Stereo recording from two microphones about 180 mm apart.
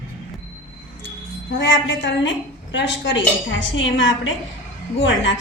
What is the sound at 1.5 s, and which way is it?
A woman's voice, 85° left.